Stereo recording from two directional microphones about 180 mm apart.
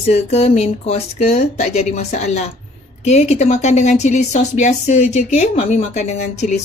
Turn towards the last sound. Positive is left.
turn(degrees=40)  # may be behind; listen again after turning